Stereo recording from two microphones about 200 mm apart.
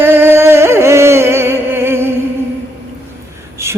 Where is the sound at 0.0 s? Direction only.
10° right (ahead or behind).